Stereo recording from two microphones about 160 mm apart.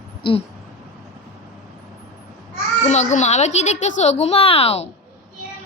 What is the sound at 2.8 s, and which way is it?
A child's voice, 45° left (ahead or behind).